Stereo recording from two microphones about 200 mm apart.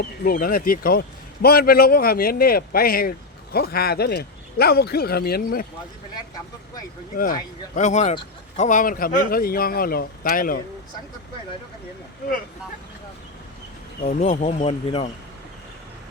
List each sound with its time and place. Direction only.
0.0 s a man's voice: 45° left (ahead or behind)
7.8 s a man's voice: 35° left (ahead or behind)
14.0 s speech: 40° left (ahead or behind)